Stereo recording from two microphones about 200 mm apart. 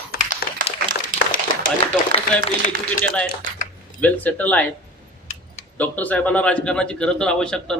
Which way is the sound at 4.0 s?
10° left (ahead or behind).